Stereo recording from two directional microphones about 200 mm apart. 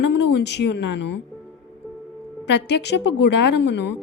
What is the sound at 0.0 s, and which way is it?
Speech, 60° left (ahead or behind).